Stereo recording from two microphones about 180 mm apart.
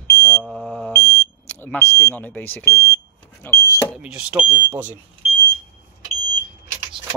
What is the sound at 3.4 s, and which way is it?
Speech, 15° left (ahead or behind).